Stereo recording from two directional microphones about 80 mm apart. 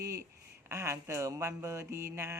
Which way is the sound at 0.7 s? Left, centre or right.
Right.